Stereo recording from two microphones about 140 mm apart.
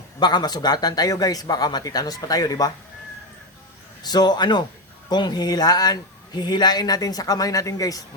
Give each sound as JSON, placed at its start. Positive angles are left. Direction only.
{"t": 0.2, "sound": "a man's voice", "side_deg": 30}
{"t": 4.0, "sound": "a man's voice", "side_deg": 30}